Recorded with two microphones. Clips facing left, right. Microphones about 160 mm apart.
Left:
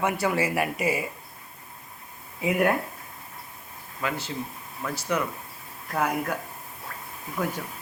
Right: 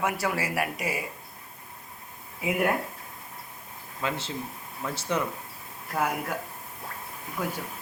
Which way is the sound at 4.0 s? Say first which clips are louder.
Left 1 dB; 25° right (ahead or behind).